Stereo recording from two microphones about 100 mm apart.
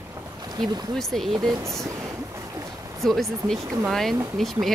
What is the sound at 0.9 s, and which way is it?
Speech, 5° left (ahead or behind).